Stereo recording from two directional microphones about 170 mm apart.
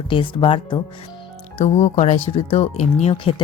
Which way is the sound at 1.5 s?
40° left (ahead or behind).